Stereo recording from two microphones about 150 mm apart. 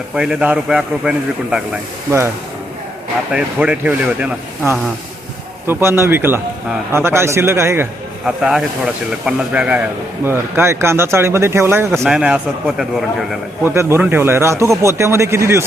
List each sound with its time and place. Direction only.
0.2 s a man's voice: 5° right (ahead or behind)
3.3 s a man's voice: 10° right (ahead or behind)
8.2 s a man's voice: 5° right (ahead or behind)